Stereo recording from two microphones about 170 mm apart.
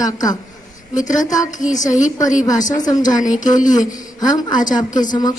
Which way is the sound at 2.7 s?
20° left (ahead or behind).